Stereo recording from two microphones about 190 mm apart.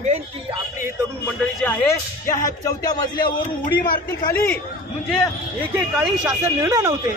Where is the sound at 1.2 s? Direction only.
10° left (ahead or behind).